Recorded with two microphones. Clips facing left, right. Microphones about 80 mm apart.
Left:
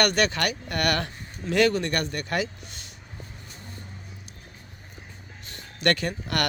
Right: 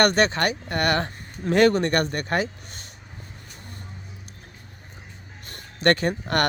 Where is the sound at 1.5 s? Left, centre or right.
Right.